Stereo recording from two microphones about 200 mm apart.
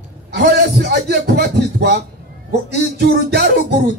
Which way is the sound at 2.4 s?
55° right (ahead or behind).